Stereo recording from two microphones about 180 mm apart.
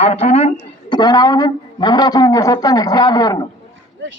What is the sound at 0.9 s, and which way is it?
A man's voice, 25° left (ahead or behind).